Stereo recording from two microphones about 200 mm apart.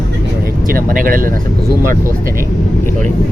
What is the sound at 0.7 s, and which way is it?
Speech, 45° right (ahead or behind).